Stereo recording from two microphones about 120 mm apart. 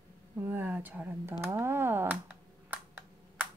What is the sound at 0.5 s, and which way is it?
Speech, 15° right (ahead or behind).